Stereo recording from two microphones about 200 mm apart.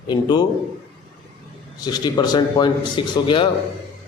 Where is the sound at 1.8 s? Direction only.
20° left (ahead or behind).